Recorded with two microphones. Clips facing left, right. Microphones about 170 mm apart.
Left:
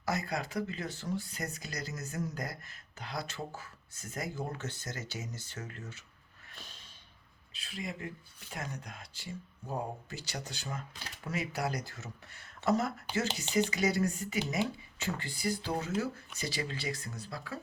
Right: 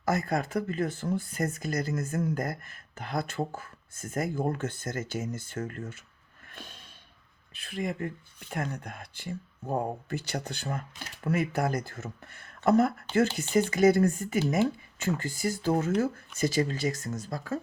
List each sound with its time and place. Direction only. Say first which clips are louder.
0.0 s speech: right 6 dB; 50° right (ahead or behind)
6.5 s snort: right 6 dB; 55° right (ahead or behind)
7.5 s speech: right 8 dB; 55° right (ahead or behind)